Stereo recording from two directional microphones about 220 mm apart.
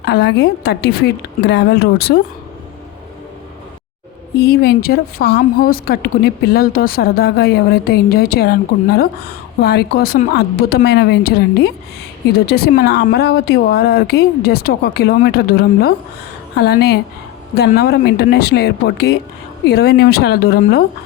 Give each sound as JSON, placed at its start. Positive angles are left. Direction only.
{"t": 0.0, "sound": "speech", "side_deg": 50}
{"t": 4.4, "sound": "speech", "side_deg": 45}